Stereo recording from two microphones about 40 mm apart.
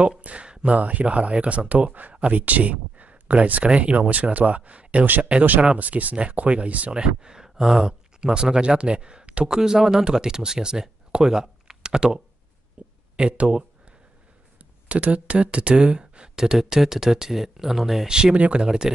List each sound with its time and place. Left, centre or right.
0.2 s a sound: right
0.5 s a sound: right
0.7 s speech: right
5.0 s speech: right
6.9 s speech: right
9.5 s speech: centre
14.9 s speech: right; by 18.0 s centre
18.0 s speech: right